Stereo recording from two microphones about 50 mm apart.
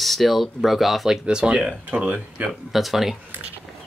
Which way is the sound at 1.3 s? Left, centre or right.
Centre.